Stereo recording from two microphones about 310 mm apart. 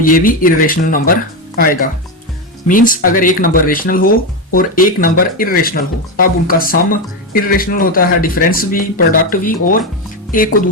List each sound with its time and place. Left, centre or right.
0.0 s speech: left